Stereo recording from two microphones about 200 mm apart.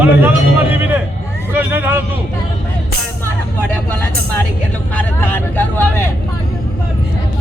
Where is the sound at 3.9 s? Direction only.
10° left (ahead or behind).